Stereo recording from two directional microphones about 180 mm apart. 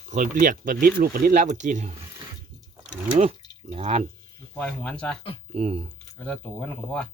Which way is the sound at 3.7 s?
35° right (ahead or behind).